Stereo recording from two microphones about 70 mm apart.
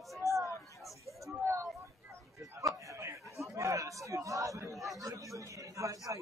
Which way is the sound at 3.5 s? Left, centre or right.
Right.